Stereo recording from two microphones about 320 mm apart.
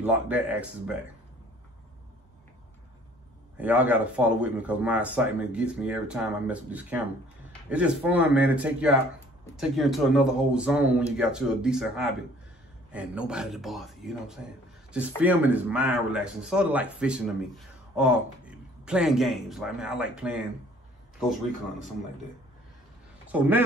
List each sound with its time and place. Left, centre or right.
0.0 s speech: centre
3.5 s speech: centre
23.3 s speech: centre